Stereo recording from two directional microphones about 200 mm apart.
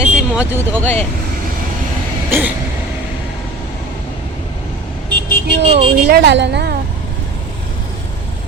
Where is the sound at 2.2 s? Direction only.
10° right (ahead or behind).